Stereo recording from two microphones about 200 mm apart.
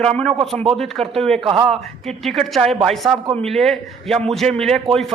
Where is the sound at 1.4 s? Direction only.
25° right (ahead or behind).